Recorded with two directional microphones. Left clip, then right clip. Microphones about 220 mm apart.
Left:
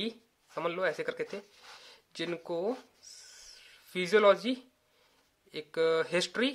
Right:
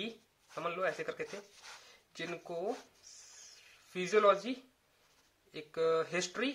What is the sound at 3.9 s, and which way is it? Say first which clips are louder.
Speech: left 4 dB; 35° left (ahead or behind).